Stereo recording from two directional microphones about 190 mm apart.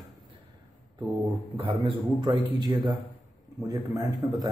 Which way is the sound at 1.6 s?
25° right (ahead or behind).